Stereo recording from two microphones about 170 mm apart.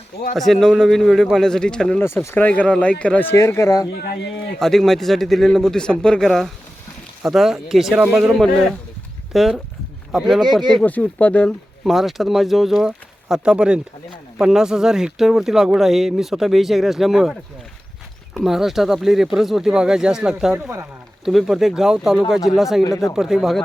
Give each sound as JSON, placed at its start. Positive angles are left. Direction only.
{"t": 0.3, "sound": "speech", "side_deg": 0}
{"t": 3.9, "sound": "speech", "side_deg": 70}
{"t": 4.6, "sound": "speech", "side_deg": 0}
{"t": 18.3, "sound": "speech", "side_deg": 0}
{"t": 22.8, "sound": "speech", "side_deg": 20}
{"t": 23.1, "sound": "speech", "side_deg": 0}